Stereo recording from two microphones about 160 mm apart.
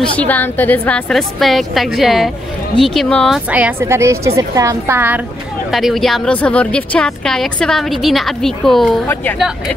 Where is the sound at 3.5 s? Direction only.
10° right (ahead or behind).